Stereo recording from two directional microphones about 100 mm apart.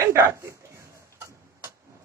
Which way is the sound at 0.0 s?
30° right (ahead or behind).